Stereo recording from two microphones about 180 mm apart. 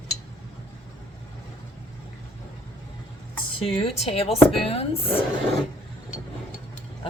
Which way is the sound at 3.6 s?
30° left (ahead or behind).